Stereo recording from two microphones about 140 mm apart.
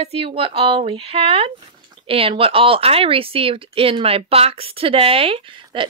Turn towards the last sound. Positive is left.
turn(degrees=-40)  # may be behind; listen again after turning